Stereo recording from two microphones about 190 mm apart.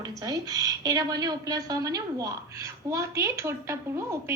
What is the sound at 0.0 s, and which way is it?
A woman's voice, 20° right (ahead or behind).